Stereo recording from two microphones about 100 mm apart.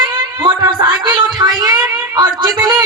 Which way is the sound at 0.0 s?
45° right (ahead or behind).